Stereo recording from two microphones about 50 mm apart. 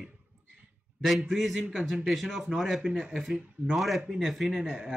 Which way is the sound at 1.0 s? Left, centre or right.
Centre.